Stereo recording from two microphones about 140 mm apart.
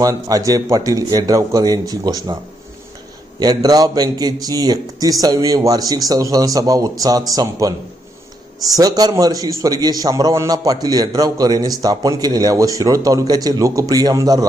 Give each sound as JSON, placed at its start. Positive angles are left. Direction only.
{"t": 0.0, "sound": "a man's voice", "side_deg": -25}
{"t": 3.4, "sound": "a man's voice", "side_deg": -30}